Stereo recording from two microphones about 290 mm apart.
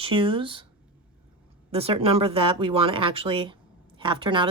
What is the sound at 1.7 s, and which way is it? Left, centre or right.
Speech, centre.